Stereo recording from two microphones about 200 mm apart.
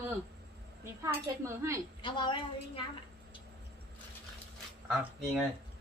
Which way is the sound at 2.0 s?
25° left (ahead or behind).